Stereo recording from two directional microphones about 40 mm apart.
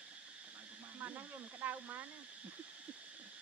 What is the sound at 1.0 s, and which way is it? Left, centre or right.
Neigh, right.